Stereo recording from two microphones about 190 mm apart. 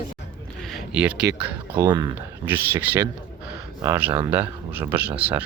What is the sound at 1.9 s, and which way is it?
Speech, 20° right (ahead or behind).